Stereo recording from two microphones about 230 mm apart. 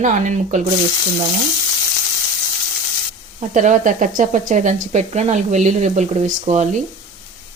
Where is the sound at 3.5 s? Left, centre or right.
Right.